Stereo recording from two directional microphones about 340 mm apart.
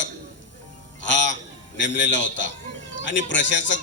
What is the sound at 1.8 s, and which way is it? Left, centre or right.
A man's voice, left.